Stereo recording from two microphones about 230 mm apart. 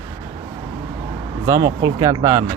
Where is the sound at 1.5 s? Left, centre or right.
Centre.